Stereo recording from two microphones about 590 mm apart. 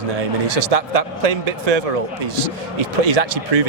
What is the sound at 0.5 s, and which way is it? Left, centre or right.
Speech, right.